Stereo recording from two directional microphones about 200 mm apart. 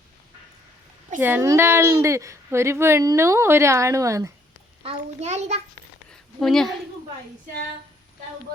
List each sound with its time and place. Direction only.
1.2 s a woman's voice: 15° right (ahead or behind)
4.8 s a child's voice: 30° right (ahead or behind)
6.1 s a sound: centre (ahead or behind)